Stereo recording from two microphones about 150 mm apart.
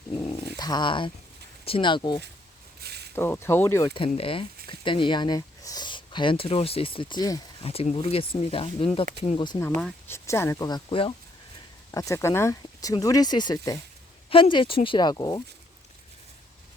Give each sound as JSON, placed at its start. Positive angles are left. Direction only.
{"t": 0.1, "sound": "dog", "side_deg": 40}
{"t": 1.6, "sound": "speech", "side_deg": 35}
{"t": 2.8, "sound": "a sound", "side_deg": -90}
{"t": 3.2, "sound": "speech", "side_deg": 15}
{"t": 4.1, "sound": "speech", "side_deg": 40}
{"t": 7.6, "sound": "speech", "side_deg": 40}
{"t": 9.6, "sound": "speech", "side_deg": 15}
{"t": 10.7, "sound": "speech", "side_deg": 30}
{"t": 11.9, "sound": "speech", "side_deg": 20}